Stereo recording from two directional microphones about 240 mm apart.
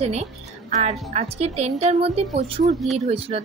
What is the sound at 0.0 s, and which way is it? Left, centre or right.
A woman's voice, right.